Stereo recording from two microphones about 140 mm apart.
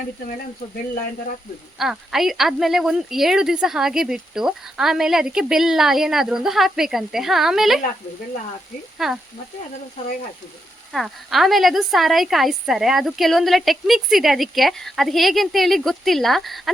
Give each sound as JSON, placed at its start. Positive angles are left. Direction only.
{"t": 1.8, "sound": "a woman's voice", "side_deg": 0}
{"t": 9.0, "sound": "a woman's voice", "side_deg": 0}
{"t": 10.9, "sound": "a woman's voice", "side_deg": 0}